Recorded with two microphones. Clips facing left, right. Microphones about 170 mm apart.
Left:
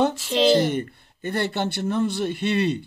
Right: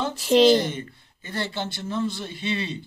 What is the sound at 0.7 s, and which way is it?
Speech, 60° left (ahead or behind).